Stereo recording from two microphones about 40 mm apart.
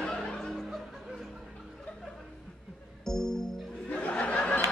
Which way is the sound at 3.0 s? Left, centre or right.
Centre.